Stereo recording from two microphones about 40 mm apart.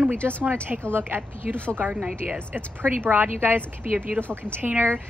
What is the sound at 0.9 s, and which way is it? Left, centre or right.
Speech, right.